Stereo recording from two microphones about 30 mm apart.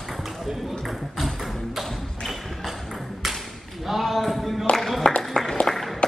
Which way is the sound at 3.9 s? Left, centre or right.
Centre.